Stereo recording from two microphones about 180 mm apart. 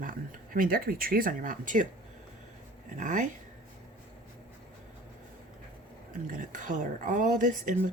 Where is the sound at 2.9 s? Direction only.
45° right (ahead or behind).